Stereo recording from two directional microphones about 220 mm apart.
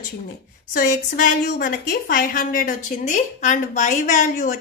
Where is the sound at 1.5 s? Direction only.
40° left (ahead or behind).